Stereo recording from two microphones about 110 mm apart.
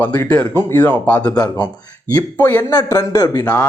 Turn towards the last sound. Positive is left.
turn(degrees=20)  # may be behind; listen again after turning